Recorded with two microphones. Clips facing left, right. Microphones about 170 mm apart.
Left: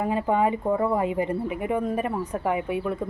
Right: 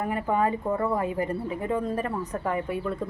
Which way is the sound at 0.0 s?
20° left (ahead or behind).